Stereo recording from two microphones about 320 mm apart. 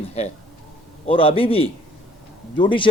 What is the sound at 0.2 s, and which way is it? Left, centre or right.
Speech, centre.